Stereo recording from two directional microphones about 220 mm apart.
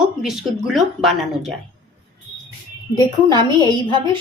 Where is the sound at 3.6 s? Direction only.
20° right (ahead or behind).